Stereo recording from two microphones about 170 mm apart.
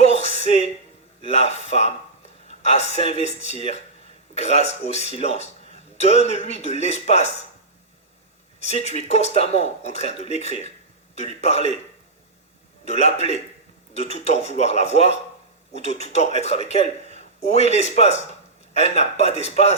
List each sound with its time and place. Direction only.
0.0 s a sound: 40° left (ahead or behind)
1.2 s a man's voice: 40° left (ahead or behind)
8.6 s a man's voice: 40° left (ahead or behind)
12.8 s a man's voice: 40° left (ahead or behind)